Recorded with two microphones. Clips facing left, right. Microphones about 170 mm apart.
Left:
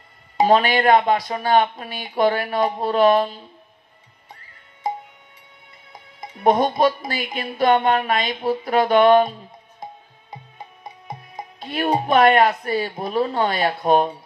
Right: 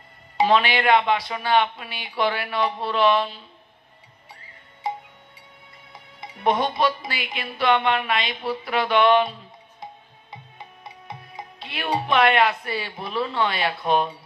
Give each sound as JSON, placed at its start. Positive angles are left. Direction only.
{"t": 0.4, "sound": "speech", "side_deg": 45}
{"t": 6.2, "sound": "speech", "side_deg": 45}
{"t": 10.3, "sound": "music", "side_deg": 45}